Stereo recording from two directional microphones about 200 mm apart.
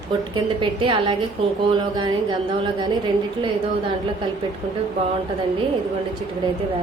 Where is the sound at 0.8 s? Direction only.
25° right (ahead or behind).